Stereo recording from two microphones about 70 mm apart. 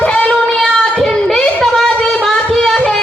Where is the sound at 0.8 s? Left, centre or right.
Centre.